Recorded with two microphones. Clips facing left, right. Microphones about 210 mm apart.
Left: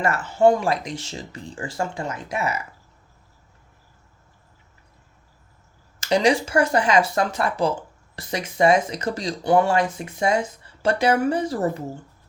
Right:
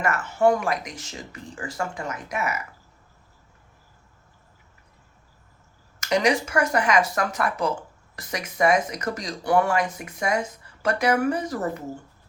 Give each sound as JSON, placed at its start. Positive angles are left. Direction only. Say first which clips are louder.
{"t": 0.0, "sound": "speech", "louder": "left 3 dB", "side_deg": 30}
{"t": 6.0, "sound": "speech", "louder": "left 3 dB", "side_deg": 30}